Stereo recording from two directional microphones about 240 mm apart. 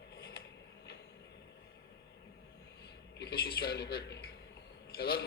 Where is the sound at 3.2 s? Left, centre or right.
Left.